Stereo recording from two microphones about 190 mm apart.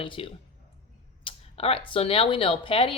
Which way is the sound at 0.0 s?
25° left (ahead or behind).